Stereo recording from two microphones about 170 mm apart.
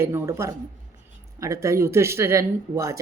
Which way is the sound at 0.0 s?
15° right (ahead or behind).